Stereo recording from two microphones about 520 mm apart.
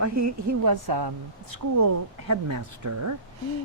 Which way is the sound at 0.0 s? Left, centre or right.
Right.